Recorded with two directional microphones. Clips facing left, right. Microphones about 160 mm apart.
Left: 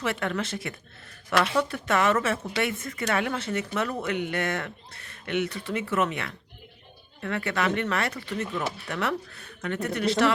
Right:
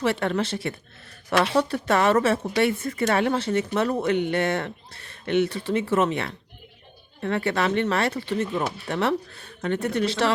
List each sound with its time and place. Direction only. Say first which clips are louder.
0.0 s speech: right 5 dB; 30° right (ahead or behind)